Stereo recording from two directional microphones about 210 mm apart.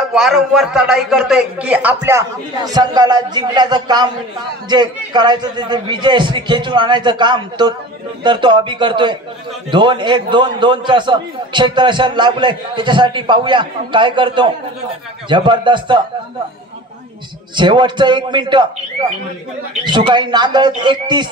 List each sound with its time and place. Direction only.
0.1 s a man's voice: centre (ahead or behind); by 16.0 s 20° right (ahead or behind)
17.6 s a man's voice: 20° right (ahead or behind)
19.8 s a man's voice: 20° right (ahead or behind)